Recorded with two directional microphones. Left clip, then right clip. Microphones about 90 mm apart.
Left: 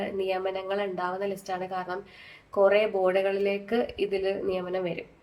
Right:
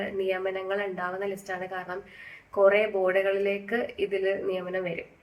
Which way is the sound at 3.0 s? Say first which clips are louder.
Even; 15° left (ahead or behind).